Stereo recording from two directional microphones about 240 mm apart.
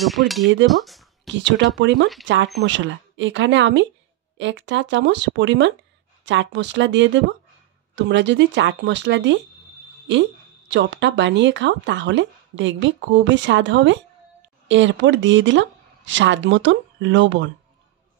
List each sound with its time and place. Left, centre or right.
0.7 s a sound: centre
1.3 s speech: right
10.7 s speech: right